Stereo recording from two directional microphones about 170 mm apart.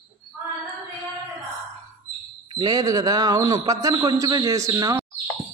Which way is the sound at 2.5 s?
20° right (ahead or behind).